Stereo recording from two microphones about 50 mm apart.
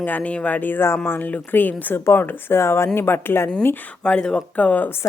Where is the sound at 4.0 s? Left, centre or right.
Centre.